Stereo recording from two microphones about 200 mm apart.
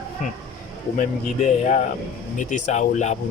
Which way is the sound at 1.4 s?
35° left (ahead or behind).